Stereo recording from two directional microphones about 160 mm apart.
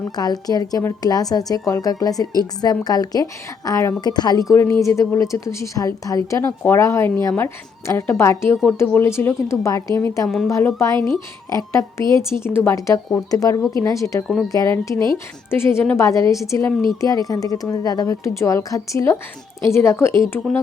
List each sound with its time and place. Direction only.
0.2 s a woman's voice: 25° left (ahead or behind)
14.9 s a woman's voice: 30° right (ahead or behind)
15.4 s a woman's voice: 15° left (ahead or behind)